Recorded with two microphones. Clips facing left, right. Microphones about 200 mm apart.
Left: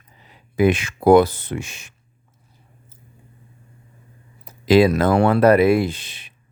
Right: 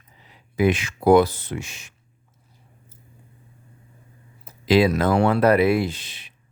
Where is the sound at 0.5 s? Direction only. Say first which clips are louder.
Left 3 dB; 55° left (ahead or behind).